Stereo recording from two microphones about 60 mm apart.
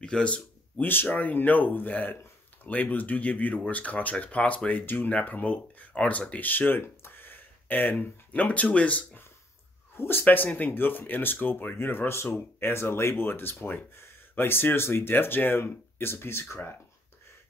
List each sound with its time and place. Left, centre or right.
0.0 s a sound: centre
1.0 s speech: left
9.9 s speech: left